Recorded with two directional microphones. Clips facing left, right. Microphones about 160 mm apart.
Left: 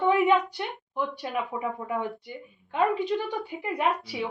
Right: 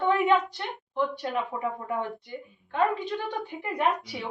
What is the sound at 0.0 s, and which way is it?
A woman's voice, 10° left (ahead or behind).